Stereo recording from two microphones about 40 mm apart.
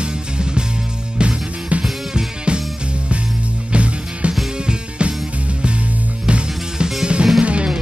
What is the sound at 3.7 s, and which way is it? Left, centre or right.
Music, right.